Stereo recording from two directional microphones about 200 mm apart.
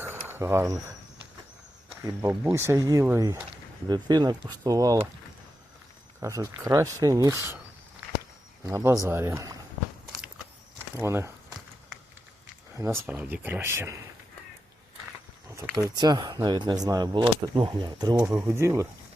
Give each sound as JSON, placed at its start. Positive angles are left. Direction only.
{"t": 0.0, "sound": "a sound", "side_deg": -10}
{"t": 1.9, "sound": "speech", "side_deg": -5}
{"t": 6.1, "sound": "speech", "side_deg": -15}
{"t": 8.6, "sound": "speech", "side_deg": -15}
{"t": 10.9, "sound": "speech", "side_deg": -15}
{"t": 13.0, "sound": "speech", "side_deg": -5}
{"t": 15.7, "sound": "speech", "side_deg": -20}